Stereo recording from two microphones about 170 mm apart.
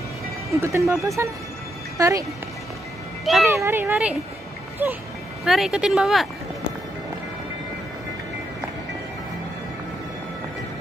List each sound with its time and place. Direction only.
0.6 s speech: 15° right (ahead or behind)
3.4 s speech: 15° right (ahead or behind)